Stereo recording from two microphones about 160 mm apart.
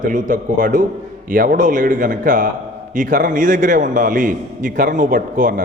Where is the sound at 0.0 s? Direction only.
55° right (ahead or behind).